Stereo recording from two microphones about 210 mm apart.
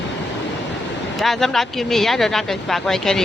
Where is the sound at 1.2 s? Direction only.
Centre (ahead or behind).